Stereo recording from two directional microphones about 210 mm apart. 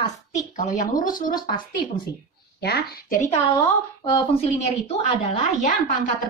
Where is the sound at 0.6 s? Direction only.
40° left (ahead or behind).